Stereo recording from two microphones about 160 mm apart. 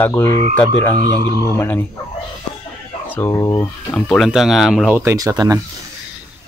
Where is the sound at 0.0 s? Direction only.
15° left (ahead or behind).